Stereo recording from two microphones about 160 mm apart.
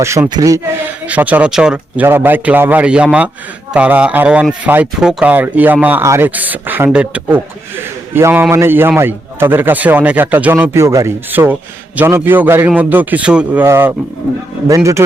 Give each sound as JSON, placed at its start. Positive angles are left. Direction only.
{"t": 0.0, "sound": "a man's voice", "side_deg": -20}
{"t": 1.0, "sound": "a man's voice", "side_deg": -10}